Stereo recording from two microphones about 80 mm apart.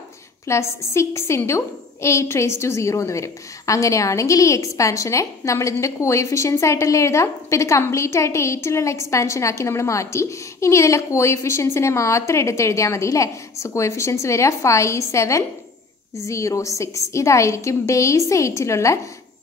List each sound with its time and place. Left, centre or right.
0.5 s a woman's voice: left